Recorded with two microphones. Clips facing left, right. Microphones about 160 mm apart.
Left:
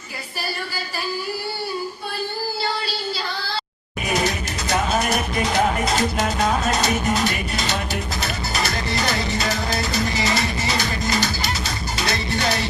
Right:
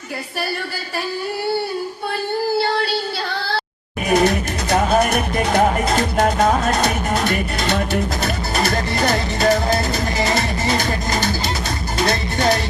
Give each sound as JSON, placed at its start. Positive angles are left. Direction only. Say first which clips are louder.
{"t": 2.6, "sound": "music", "louder": "right 7 dB", "side_deg": -60}
{"t": 4.1, "sound": "music", "louder": "right 7 dB", "side_deg": -55}